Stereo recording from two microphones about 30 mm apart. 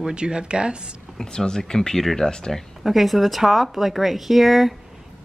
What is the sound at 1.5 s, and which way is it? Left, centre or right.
Speech, centre.